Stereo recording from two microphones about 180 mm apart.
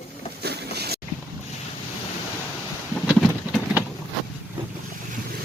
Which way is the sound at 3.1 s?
Centre (ahead or behind).